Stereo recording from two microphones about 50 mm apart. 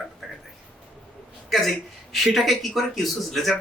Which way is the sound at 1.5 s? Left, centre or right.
Centre.